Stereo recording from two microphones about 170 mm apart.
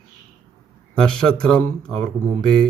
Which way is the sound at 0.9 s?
5° left (ahead or behind).